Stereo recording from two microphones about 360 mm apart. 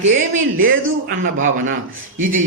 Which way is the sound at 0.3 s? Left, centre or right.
Right.